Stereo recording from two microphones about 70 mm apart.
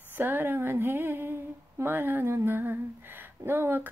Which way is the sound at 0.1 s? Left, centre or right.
Right.